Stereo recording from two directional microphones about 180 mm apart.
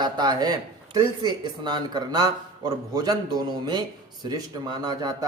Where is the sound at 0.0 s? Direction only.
25° right (ahead or behind).